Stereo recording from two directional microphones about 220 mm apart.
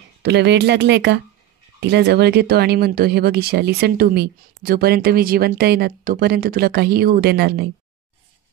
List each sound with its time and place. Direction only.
0.2 s speech: 50° right (ahead or behind)